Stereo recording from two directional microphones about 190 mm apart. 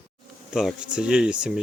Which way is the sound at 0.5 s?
5° right (ahead or behind).